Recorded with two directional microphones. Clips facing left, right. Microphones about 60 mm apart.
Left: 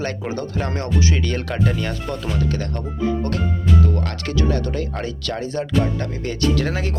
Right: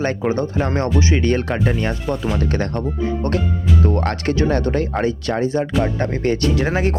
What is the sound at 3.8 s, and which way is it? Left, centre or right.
Speech, right.